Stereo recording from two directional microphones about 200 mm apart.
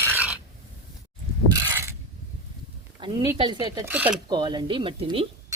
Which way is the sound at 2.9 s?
20° right (ahead or behind).